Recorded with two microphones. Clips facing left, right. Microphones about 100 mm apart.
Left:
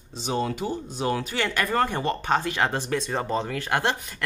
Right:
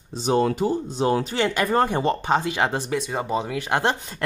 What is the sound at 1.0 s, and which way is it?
Speech, 30° right (ahead or behind).